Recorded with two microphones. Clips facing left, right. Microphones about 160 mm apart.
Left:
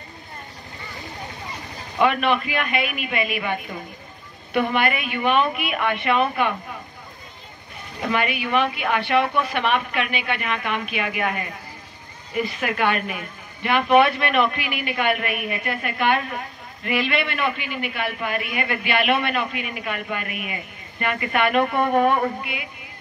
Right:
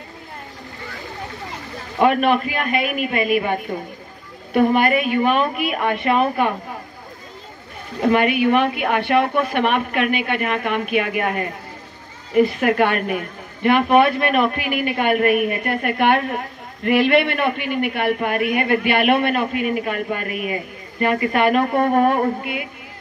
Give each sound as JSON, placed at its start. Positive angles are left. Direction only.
{"t": 2.0, "sound": "speech", "side_deg": -45}
{"t": 4.6, "sound": "a woman's voice", "side_deg": -40}
{"t": 8.0, "sound": "a woman's voice", "side_deg": -50}